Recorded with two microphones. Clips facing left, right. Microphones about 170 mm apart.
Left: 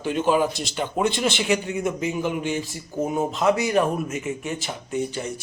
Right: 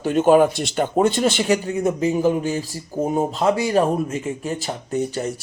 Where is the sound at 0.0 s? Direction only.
45° right (ahead or behind).